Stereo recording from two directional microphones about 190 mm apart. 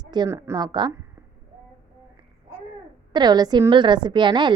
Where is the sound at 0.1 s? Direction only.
20° right (ahead or behind).